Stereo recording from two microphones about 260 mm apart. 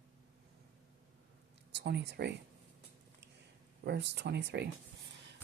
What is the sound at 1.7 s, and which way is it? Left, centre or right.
Speech, right.